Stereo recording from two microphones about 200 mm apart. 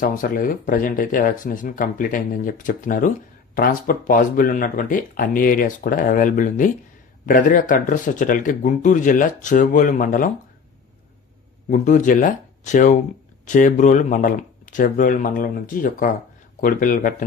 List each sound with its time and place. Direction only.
0.0 s speech: 40° left (ahead or behind)
11.7 s speech: 40° left (ahead or behind)